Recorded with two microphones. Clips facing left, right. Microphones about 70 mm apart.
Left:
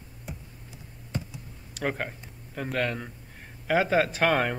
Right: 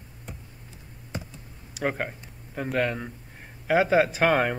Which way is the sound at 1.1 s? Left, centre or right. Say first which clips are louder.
Left 1 dB; centre.